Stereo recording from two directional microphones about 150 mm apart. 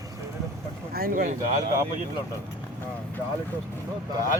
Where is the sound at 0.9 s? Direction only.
70° right (ahead or behind).